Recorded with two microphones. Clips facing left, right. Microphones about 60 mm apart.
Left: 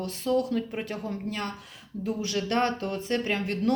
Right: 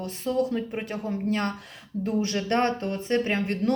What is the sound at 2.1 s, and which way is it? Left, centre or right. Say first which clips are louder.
Speech: right 3 dB; right.